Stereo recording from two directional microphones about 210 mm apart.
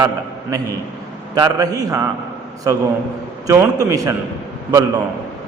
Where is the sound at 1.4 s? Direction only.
20° right (ahead or behind).